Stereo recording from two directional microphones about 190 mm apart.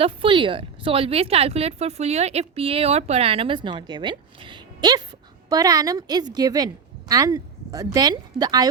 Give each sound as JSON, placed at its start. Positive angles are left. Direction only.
{"t": 0.0, "sound": "a woman's voice", "side_deg": -25}